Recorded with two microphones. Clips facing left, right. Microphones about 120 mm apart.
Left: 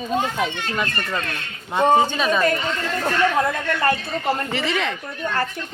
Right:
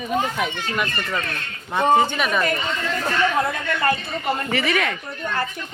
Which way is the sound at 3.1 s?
10° right (ahead or behind).